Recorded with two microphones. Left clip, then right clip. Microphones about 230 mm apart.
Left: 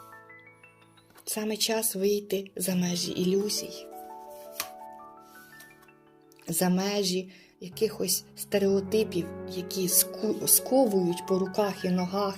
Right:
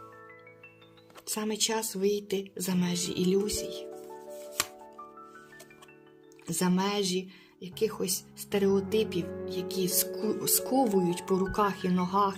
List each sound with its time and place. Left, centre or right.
1.2 s speech: centre
6.6 s speech: centre